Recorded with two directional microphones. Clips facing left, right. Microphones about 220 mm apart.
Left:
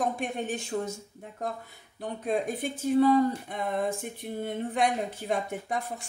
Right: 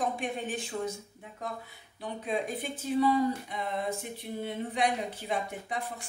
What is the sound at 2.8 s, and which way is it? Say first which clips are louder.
Speech: left 4 dB; 50° left (ahead or behind).